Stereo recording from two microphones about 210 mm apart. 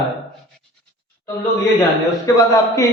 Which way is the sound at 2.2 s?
15° left (ahead or behind).